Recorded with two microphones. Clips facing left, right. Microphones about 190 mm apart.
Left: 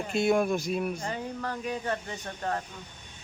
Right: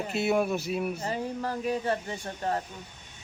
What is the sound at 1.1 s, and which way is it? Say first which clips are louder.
Speech: right 3 dB; 35° right (ahead or behind).